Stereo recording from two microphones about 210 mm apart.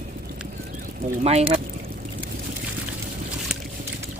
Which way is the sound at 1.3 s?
30° right (ahead or behind).